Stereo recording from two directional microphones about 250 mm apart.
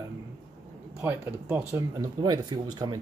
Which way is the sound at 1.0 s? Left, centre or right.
Centre.